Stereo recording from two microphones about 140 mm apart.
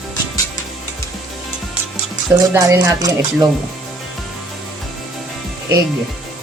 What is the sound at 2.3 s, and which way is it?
Speech, 20° right (ahead or behind).